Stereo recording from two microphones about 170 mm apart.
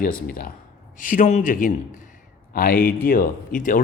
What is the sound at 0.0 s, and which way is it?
A man's voice, 60° left (ahead or behind).